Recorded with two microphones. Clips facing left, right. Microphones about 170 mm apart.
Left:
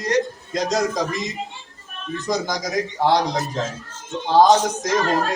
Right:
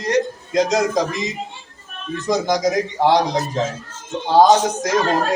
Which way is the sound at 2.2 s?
20° right (ahead or behind).